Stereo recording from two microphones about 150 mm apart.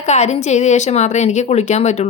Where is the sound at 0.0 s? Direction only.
50° left (ahead or behind).